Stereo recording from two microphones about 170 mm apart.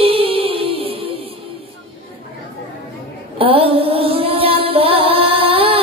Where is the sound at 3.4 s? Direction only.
35° right (ahead or behind).